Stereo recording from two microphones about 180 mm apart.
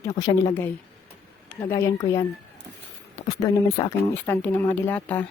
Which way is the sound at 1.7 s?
15° left (ahead or behind).